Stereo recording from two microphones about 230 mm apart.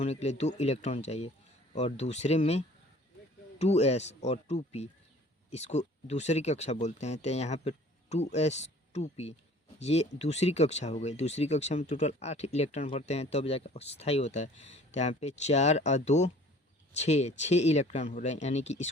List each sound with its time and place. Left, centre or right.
0.0 s speech: left